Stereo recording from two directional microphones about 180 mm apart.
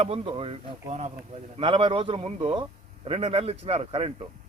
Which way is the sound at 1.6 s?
30° right (ahead or behind).